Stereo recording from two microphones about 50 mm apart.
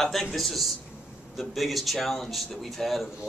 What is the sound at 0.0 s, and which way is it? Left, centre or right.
Speech, centre.